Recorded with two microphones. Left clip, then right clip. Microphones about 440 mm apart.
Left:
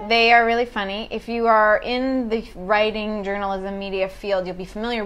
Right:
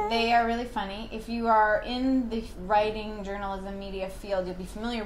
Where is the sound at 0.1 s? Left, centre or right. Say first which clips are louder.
Left 12 dB; left.